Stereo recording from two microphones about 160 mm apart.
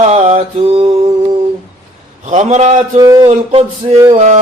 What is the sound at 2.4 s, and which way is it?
Music, 45° right (ahead or behind).